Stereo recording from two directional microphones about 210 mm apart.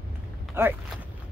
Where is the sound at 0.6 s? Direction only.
10° right (ahead or behind).